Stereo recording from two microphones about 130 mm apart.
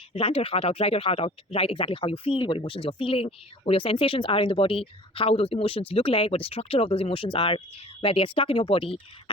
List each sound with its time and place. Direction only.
0.1 s speech: 45° left (ahead or behind)